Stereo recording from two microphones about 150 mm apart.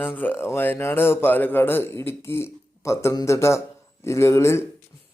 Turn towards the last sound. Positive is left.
turn(degrees=20)  # may be behind; listen again after turning